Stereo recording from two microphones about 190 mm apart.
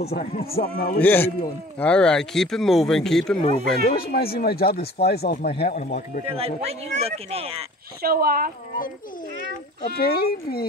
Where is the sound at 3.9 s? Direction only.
55° left (ahead or behind).